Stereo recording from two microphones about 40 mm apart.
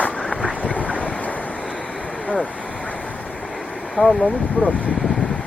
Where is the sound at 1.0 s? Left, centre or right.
Left.